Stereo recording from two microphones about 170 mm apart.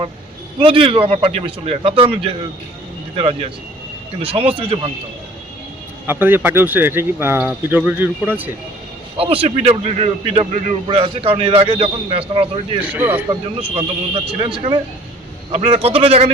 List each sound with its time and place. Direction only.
0.6 s a man's voice: 30° right (ahead or behind)
6.1 s speech: 10° right (ahead or behind)
9.1 s a man's voice: 35° right (ahead or behind)
12.8 s speech: 10° right (ahead or behind)
13.7 s a man's voice: 35° right (ahead or behind)